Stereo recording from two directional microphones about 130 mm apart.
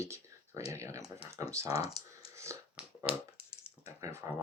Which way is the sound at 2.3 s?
20° right (ahead or behind).